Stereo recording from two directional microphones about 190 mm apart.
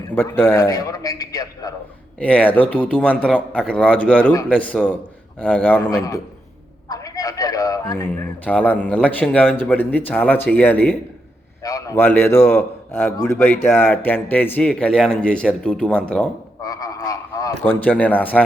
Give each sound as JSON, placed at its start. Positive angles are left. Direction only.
{"t": 0.2, "sound": "speech", "side_deg": 10}
{"t": 2.1, "sound": "speech", "side_deg": 5}
{"t": 6.8, "sound": "a sound", "side_deg": 20}
{"t": 8.1, "sound": "a man's voice", "side_deg": 5}
{"t": 16.6, "sound": "frog", "side_deg": 20}